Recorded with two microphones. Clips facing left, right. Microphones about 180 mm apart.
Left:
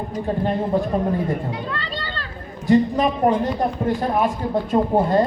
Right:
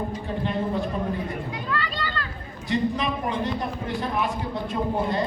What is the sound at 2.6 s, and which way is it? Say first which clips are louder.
A man's voice: left 8 dB; 45° left (ahead or behind).